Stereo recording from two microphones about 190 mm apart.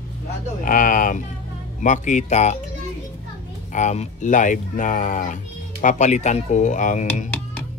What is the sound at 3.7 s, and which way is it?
Speech, 40° left (ahead or behind).